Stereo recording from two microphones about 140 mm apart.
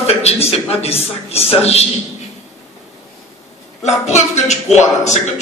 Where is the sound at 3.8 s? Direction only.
50° left (ahead or behind).